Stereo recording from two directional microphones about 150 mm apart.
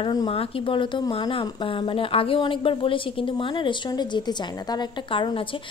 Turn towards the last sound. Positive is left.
turn(degrees=35)  # may be behind; listen again after turning